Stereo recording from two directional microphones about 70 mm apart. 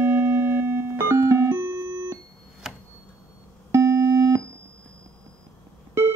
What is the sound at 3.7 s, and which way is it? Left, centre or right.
Busy signal, right.